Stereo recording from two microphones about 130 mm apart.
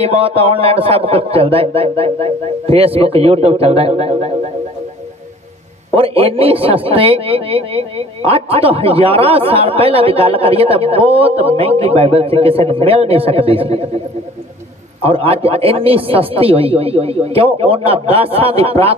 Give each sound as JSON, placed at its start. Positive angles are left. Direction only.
{"t": 0.0, "sound": "speech", "side_deg": -50}
{"t": 5.9, "sound": "speech", "side_deg": -45}
{"t": 15.0, "sound": "speech", "side_deg": -45}